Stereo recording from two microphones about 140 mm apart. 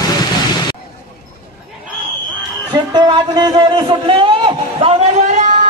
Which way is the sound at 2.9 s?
35° right (ahead or behind).